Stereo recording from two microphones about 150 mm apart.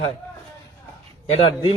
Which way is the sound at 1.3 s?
35° left (ahead or behind).